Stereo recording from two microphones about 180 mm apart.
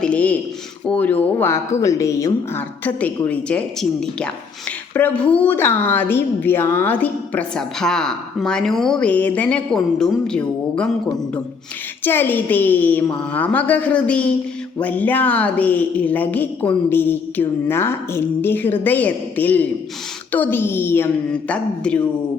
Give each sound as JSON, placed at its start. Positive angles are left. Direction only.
{"t": 0.0, "sound": "a woman's voice", "side_deg": 5}